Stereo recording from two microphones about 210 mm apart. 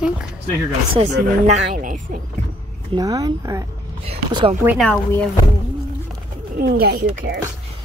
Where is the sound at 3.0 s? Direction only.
20° right (ahead or behind).